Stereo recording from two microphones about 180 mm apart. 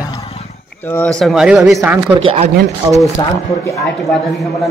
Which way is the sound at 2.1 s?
35° right (ahead or behind).